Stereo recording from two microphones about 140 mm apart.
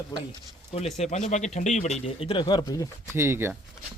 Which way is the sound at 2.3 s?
35° left (ahead or behind).